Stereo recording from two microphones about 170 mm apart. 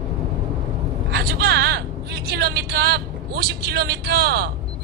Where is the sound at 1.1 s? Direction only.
70° right (ahead or behind).